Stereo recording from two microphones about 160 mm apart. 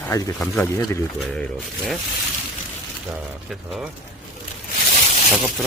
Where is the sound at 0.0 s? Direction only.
20° left (ahead or behind).